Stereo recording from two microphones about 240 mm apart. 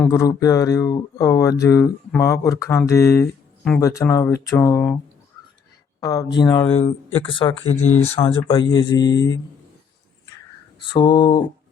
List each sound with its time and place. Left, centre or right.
0.0 s speech: centre
6.0 s speech: centre
8.4 s speech: centre
10.8 s speech: centre